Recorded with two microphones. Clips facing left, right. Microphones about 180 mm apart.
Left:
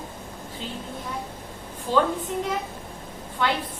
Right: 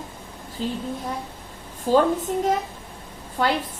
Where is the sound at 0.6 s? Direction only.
40° right (ahead or behind).